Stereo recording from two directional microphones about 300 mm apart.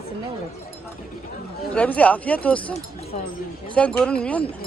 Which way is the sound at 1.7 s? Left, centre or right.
Centre.